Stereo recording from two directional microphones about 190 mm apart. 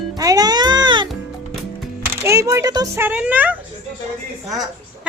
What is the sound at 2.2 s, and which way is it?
A child's voice, 15° right (ahead or behind).